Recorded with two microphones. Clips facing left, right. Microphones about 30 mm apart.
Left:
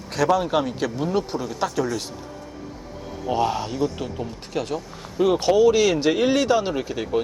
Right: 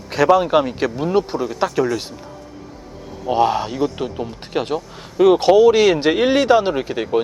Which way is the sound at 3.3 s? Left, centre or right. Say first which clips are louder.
Right 6 dB; right.